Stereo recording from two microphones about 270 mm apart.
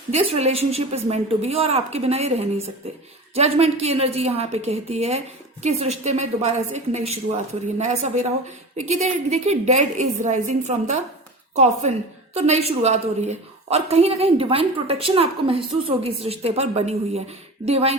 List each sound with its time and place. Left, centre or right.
0.1 s a woman's voice: right